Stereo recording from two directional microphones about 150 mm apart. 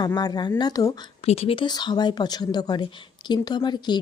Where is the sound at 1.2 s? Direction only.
40° left (ahead or behind).